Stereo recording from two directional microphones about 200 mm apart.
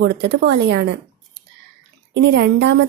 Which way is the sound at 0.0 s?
55° right (ahead or behind).